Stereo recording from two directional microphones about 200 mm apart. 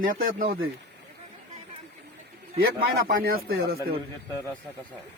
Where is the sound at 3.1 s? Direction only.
50° right (ahead or behind).